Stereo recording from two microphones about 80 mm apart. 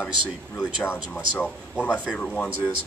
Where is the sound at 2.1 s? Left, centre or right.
Centre.